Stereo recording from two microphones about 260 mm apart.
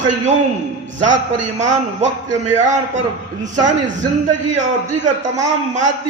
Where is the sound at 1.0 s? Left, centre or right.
Right.